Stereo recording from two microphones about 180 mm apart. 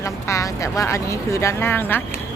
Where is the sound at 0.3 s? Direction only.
15° left (ahead or behind).